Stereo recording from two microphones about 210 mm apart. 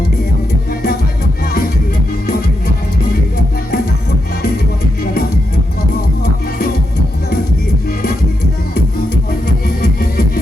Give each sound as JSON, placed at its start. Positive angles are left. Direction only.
{"t": 0.7, "sound": "music", "side_deg": 45}
{"t": 3.0, "sound": "music", "side_deg": 45}
{"t": 9.6, "sound": "music", "side_deg": 45}